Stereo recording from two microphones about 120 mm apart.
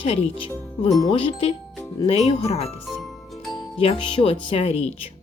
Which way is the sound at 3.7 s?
50° left (ahead or behind).